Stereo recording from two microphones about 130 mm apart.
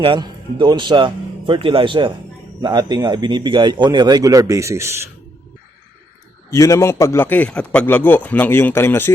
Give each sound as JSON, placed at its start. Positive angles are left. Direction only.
{"t": 0.0, "sound": "a man's voice", "side_deg": -40}
{"t": 6.5, "sound": "a man's voice", "side_deg": 25}